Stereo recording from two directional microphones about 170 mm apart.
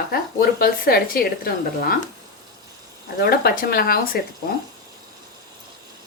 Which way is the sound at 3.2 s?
60° left (ahead or behind).